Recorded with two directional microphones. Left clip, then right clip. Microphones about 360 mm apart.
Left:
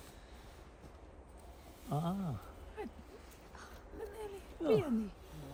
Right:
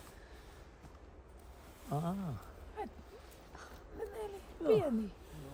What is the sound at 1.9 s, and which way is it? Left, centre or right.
Speech, centre.